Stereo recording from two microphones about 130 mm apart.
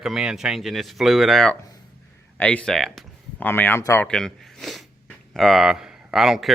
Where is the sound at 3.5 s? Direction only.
15° left (ahead or behind).